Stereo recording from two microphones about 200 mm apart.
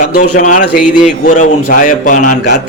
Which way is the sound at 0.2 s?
40° left (ahead or behind).